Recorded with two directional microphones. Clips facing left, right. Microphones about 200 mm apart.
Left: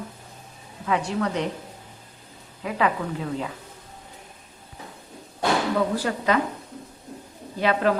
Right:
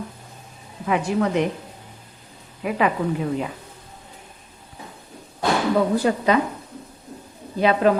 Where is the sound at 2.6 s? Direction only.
15° right (ahead or behind).